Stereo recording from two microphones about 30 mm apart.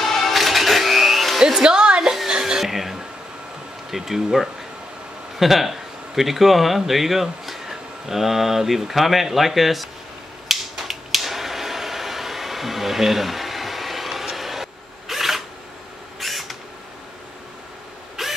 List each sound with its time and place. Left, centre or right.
0.0 s music: centre
1.4 s hair dryer: right
2.2 s music: right
2.6 s a sound: centre
3.9 s speech: centre
10.5 s a sound: centre
18.2 s drill: centre